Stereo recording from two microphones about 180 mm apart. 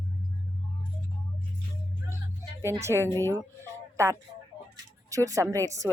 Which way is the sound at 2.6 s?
15° right (ahead or behind).